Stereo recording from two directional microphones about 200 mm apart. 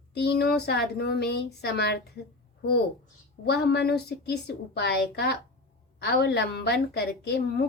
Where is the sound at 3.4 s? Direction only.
55° left (ahead or behind).